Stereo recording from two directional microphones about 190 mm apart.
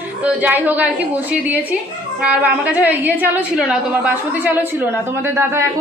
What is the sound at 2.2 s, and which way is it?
A woman's voice, 5° right (ahead or behind).